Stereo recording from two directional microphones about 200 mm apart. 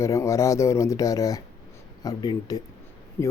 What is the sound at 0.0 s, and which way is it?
Speech, 15° left (ahead or behind).